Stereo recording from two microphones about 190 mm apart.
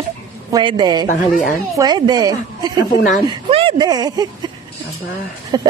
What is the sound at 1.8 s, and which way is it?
A woman's voice, 20° right (ahead or behind).